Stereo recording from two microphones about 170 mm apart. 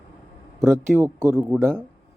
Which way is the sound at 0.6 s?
15° right (ahead or behind).